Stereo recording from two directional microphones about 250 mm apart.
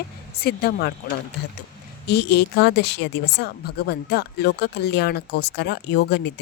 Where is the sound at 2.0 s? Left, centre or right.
Left.